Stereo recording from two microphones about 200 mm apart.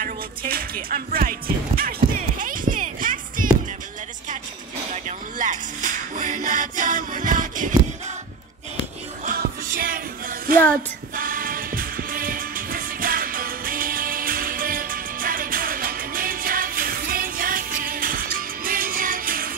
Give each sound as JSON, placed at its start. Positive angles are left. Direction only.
{"t": 0.0, "sound": "speech", "side_deg": -45}
{"t": 1.8, "sound": "music", "side_deg": -45}
{"t": 4.9, "sound": "music", "side_deg": -40}
{"t": 9.8, "sound": "music", "side_deg": -45}